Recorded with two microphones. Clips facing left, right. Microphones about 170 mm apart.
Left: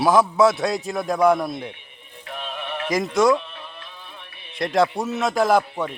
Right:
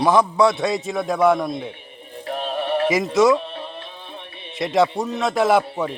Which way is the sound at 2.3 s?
35° right (ahead or behind).